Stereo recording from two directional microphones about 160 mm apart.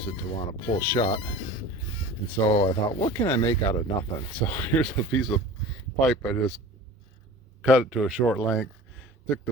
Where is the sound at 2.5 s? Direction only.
30° left (ahead or behind).